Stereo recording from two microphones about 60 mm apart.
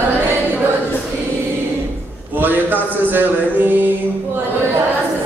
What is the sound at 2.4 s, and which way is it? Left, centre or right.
Mantra, right.